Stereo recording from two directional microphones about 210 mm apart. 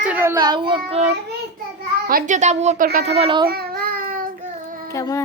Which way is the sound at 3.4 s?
45° right (ahead or behind).